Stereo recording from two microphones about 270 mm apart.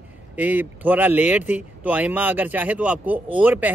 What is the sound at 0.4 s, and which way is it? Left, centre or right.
Speech, centre.